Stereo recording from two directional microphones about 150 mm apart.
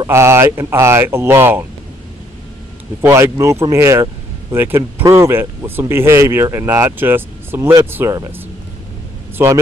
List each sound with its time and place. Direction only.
0.0 s speech: 20° right (ahead or behind)
3.0 s speech: 20° right (ahead or behind)